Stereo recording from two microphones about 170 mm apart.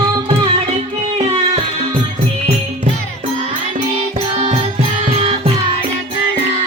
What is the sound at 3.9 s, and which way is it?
Music, 40° right (ahead or behind).